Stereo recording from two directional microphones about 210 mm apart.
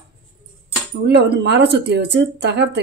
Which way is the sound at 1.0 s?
55° right (ahead or behind).